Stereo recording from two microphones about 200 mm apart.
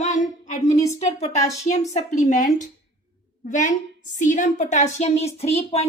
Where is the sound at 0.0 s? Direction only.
35° left (ahead or behind).